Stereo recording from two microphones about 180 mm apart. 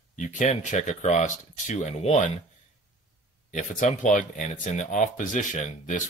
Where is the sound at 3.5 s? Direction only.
45° left (ahead or behind).